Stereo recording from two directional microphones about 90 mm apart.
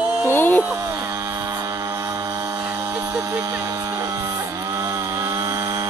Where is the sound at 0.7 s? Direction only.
35° right (ahead or behind); by 2.5 s 50° right (ahead or behind).